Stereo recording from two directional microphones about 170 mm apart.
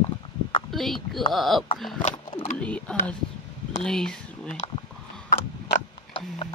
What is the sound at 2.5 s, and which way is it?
Speech, 5° left (ahead or behind).